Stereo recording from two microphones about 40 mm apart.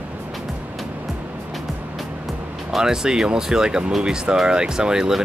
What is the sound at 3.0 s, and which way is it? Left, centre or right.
Speech, centre.